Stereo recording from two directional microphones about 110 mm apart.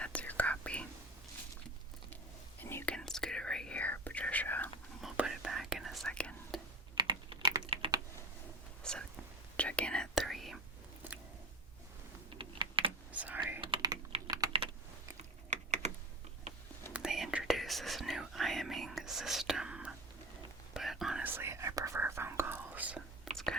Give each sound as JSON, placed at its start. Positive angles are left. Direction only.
{"t": 0.0, "sound": "whispering", "side_deg": 15}
{"t": 2.6, "sound": "whispering", "side_deg": 20}
{"t": 2.9, "sound": "whispering", "side_deg": 5}
{"t": 4.9, "sound": "whispering", "side_deg": -5}
{"t": 6.9, "sound": "typing", "side_deg": -45}
{"t": 8.8, "sound": "whispering", "side_deg": 5}
{"t": 12.4, "sound": "typing", "side_deg": -50}
{"t": 13.1, "sound": "whispering", "side_deg": -15}
{"t": 13.6, "sound": "typing", "side_deg": -45}
{"t": 14.4, "sound": "typing", "side_deg": -30}
{"t": 15.4, "sound": "typing", "side_deg": -90}
{"t": 16.9, "sound": "whispering", "side_deg": -5}
{"t": 21.2, "sound": "whispering", "side_deg": -20}
{"t": 23.3, "sound": "whispering", "side_deg": 0}